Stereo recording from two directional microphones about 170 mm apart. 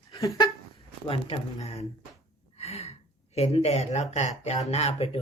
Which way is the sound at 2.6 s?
40° left (ahead or behind).